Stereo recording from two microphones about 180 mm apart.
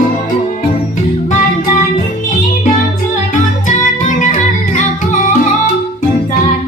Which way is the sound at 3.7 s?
45° left (ahead or behind).